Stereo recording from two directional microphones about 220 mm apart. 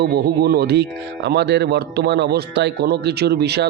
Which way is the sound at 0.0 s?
45° right (ahead or behind).